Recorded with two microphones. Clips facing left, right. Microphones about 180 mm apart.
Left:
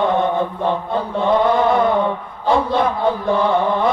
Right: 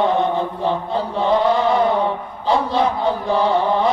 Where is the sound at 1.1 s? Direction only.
55° left (ahead or behind).